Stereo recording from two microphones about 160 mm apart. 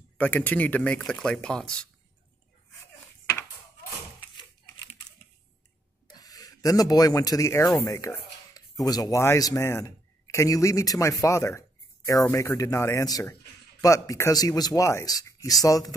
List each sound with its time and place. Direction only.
0.2 s speech: 10° left (ahead or behind)
6.0 s speech: 25° left (ahead or behind)